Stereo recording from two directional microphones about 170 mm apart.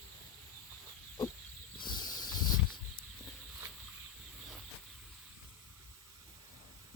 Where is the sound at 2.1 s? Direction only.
25° left (ahead or behind).